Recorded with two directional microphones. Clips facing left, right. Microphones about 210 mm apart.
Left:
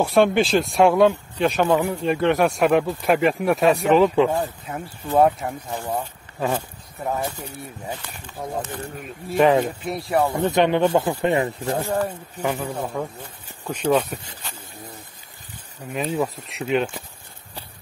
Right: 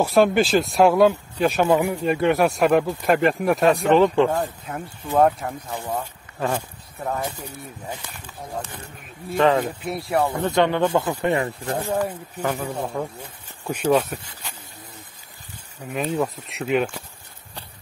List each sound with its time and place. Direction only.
0.0 s speech: centre (ahead or behind)
9.4 s speech: 15° left (ahead or behind)
9.8 s speech: centre (ahead or behind)
10.3 s speech: 20° left (ahead or behind)
12.4 s speech: 5° left (ahead or behind)
15.9 s speech: centre (ahead or behind)